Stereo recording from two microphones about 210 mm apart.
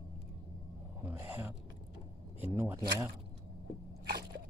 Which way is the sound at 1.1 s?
10° right (ahead or behind).